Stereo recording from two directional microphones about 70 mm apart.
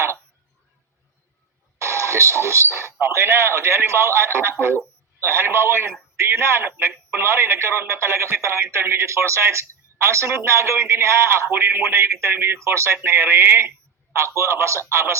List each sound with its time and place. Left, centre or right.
1.8 s speech: right